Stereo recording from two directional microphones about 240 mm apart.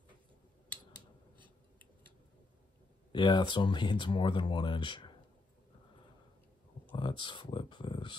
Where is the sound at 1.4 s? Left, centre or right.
Centre.